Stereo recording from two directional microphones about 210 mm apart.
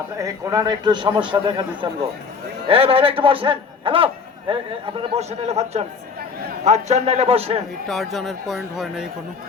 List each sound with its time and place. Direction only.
0.2 s a man's voice: 15° right (ahead or behind)
7.9 s speech: centre (ahead or behind)